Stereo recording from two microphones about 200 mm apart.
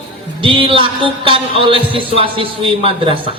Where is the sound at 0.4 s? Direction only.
25° right (ahead or behind).